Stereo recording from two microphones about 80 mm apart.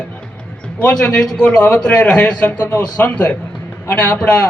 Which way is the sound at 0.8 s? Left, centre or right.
Centre.